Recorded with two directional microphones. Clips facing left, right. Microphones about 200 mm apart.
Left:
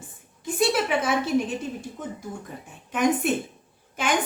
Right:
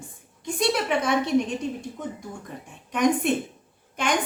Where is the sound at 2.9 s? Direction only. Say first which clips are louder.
Right 1 dB; 5° left (ahead or behind).